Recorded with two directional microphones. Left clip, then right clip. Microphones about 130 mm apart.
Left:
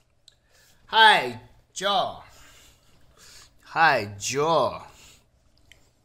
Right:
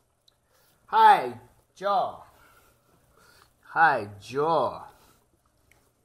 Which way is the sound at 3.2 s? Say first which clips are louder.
Left 7 dB; 5° left (ahead or behind).